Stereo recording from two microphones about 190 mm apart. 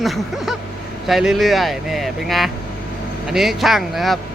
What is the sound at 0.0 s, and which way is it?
Speech, centre (ahead or behind).